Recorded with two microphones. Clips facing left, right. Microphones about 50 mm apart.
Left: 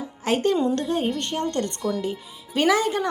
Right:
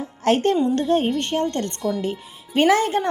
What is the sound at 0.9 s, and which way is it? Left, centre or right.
Speech, right.